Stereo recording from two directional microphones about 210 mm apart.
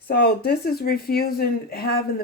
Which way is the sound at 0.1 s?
45° left (ahead or behind).